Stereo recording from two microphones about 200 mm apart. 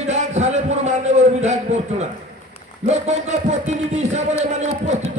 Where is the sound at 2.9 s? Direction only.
35° right (ahead or behind).